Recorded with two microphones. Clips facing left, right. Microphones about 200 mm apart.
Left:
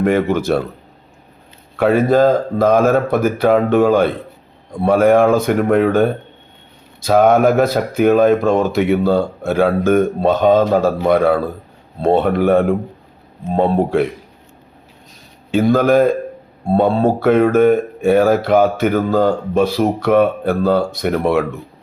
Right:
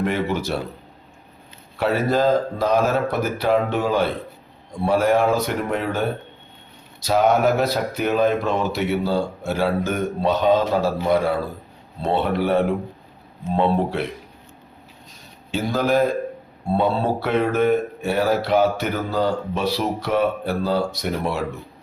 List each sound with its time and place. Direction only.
0.0 s speech: 50° left (ahead or behind)
1.8 s speech: 50° left (ahead or behind)
15.5 s speech: 55° left (ahead or behind)